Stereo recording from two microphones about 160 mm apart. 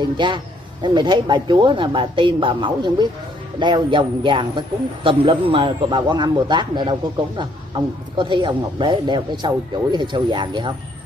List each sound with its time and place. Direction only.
0.0 s speech: 30° right (ahead or behind)